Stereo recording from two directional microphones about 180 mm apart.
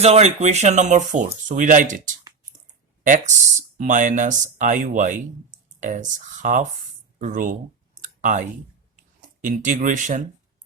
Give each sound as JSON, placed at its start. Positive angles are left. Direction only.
{"t": 0.0, "sound": "speech", "side_deg": -35}
{"t": 8.0, "sound": "clicking", "side_deg": -45}
{"t": 9.4, "sound": "speech", "side_deg": -45}